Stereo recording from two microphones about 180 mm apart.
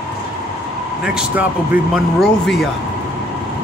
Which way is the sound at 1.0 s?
5° right (ahead or behind).